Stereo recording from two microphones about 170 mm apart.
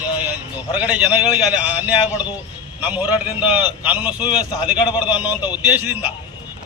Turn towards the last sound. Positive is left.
turn(degrees=-10)  # may be behind; listen again after turning